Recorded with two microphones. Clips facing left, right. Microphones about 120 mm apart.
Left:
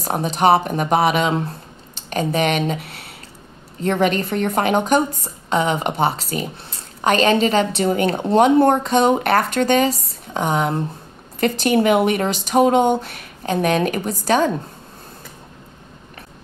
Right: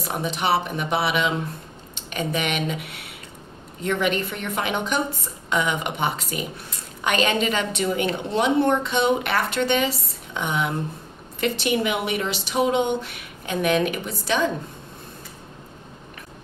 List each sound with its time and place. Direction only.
0.0 s a woman's voice: 40° left (ahead or behind)